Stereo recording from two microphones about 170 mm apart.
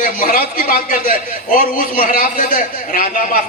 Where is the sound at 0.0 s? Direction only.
55° left (ahead or behind).